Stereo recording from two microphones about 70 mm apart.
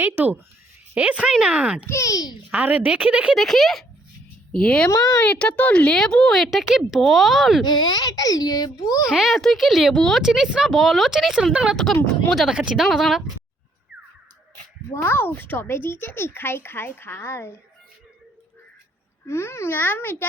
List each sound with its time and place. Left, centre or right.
0.0 s speech: right
0.9 s a woman's voice: right
1.9 s a child's voice: left
2.5 s a woman's voice: right
3.3 s speech: centre
4.5 s speech: centre
7.6 s a child's voice: left
8.7 s a child's voice: left
9.0 s speech: centre
10.2 s speech: centre
15.0 s speech: left
19.3 s a child's voice: left